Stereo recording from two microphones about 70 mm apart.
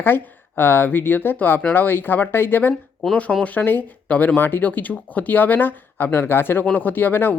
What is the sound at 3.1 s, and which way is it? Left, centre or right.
Speech, centre.